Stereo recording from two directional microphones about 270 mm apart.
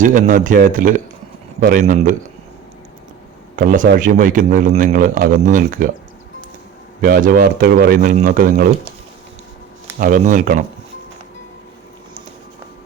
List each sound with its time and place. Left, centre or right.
0.0 s a man's voice: right
3.5 s a man's voice: right
7.0 s speech: right
10.0 s a man's voice: right